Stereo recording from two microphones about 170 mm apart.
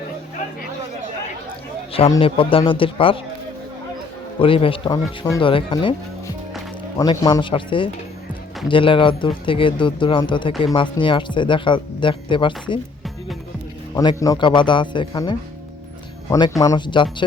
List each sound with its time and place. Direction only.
1.9 s speech: 35° left (ahead or behind)
4.4 s speech: 30° left (ahead or behind)
7.0 s speech: 25° left (ahead or behind)
13.9 s speech: 20° left (ahead or behind)
16.6 s speech: 25° left (ahead or behind)